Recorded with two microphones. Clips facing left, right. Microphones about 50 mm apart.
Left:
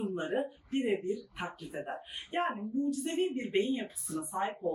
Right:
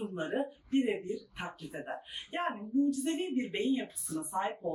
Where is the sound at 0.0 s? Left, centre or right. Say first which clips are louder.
Left 1 dB; centre.